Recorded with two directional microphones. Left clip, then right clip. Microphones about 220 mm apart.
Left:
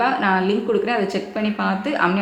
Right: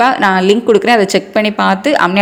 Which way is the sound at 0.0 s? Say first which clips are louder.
Right 8 dB; 40° right (ahead or behind).